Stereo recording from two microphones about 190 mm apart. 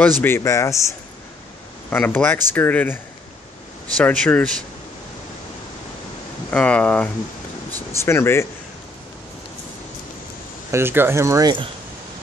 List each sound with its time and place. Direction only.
0.2 s speech: 15° left (ahead or behind)
4.0 s speech: 5° left (ahead or behind)
6.5 s speech: 5° left (ahead or behind)
10.7 s speech: 10° right (ahead or behind)